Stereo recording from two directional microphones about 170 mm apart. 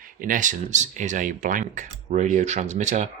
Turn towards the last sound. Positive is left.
turn(degrees=-45)  # may be behind; listen again after turning